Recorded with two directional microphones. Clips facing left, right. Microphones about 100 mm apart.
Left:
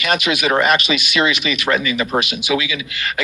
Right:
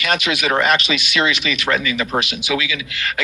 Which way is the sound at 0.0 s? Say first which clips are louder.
Left 2 dB; 15° left (ahead or behind).